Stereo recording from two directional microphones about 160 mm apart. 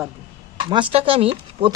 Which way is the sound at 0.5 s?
30° right (ahead or behind).